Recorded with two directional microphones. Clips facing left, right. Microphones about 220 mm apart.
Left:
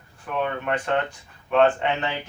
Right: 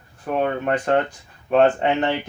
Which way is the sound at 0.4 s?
40° right (ahead or behind).